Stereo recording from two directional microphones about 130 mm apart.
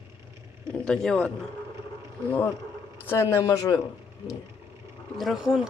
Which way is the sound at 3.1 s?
20° left (ahead or behind).